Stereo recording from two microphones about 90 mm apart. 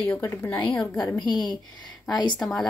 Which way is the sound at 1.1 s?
55° left (ahead or behind).